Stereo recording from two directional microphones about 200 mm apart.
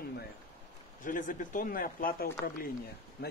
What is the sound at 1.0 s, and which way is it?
Speech, 40° left (ahead or behind).